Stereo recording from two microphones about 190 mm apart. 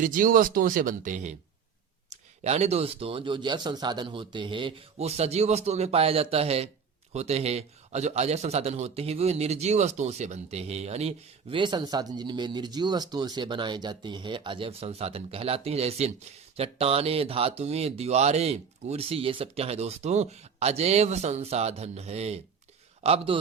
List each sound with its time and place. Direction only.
0.0 s a man's voice: 45° right (ahead or behind); by 23.4 s 30° right (ahead or behind)